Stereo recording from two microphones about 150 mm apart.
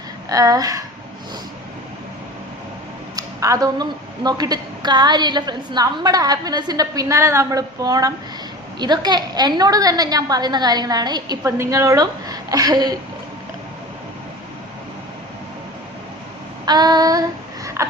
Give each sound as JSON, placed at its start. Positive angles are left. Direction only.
{"t": 0.3, "sound": "a woman's voice", "side_deg": -25}
{"t": 3.2, "sound": "a woman's voice", "side_deg": -25}
{"t": 16.6, "sound": "a woman's voice", "side_deg": -25}